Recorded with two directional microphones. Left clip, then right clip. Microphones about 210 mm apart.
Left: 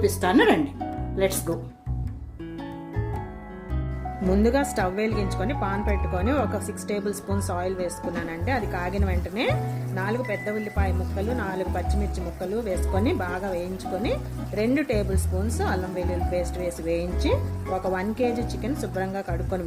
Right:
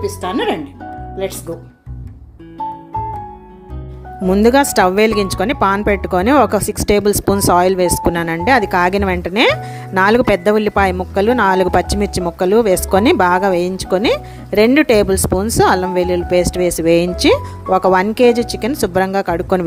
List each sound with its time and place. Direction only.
0.0 s speech: 5° right (ahead or behind)
4.3 s speech: 45° right (ahead or behind)